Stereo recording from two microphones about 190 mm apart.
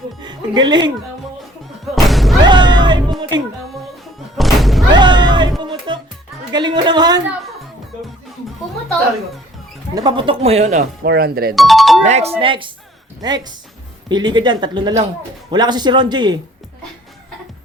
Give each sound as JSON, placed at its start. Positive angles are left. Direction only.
{"t": 0.2, "sound": "speech", "side_deg": -25}
{"t": 1.8, "sound": "music", "side_deg": 0}
{"t": 2.4, "sound": "music", "side_deg": -25}
{"t": 4.4, "sound": "thump", "side_deg": 0}
{"t": 4.9, "sound": "music", "side_deg": -25}
{"t": 6.5, "sound": "a man's voice", "side_deg": -25}
{"t": 9.9, "sound": "a man's voice", "side_deg": -20}
{"t": 11.0, "sound": "speech", "side_deg": -55}
{"t": 11.5, "sound": "speech", "side_deg": 0}
{"t": 12.0, "sound": "a man's voice", "side_deg": -35}
{"t": 14.1, "sound": "a man's voice", "side_deg": -25}